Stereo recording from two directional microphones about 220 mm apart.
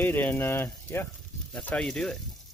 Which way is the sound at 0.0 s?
10° left (ahead or behind).